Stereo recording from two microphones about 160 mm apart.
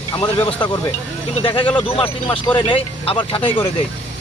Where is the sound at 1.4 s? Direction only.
30° left (ahead or behind).